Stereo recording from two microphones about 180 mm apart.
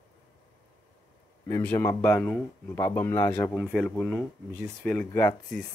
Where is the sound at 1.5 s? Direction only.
10° left (ahead or behind).